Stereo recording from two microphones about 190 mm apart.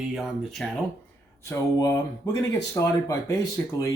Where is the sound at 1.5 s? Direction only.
15° left (ahead or behind).